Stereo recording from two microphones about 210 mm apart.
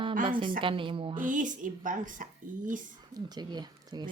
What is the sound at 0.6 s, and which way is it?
Speech, 25° right (ahead or behind).